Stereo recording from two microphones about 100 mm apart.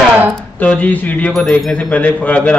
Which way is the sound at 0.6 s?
15° left (ahead or behind).